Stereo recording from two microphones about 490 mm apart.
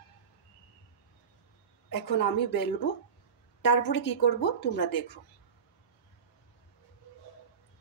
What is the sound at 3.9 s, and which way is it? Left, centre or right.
Speech, left.